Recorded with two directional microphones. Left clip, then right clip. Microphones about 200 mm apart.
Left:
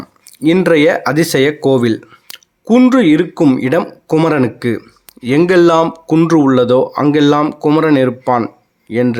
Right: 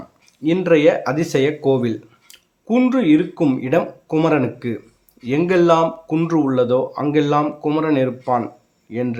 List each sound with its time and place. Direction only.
0.3 s speech: 35° left (ahead or behind)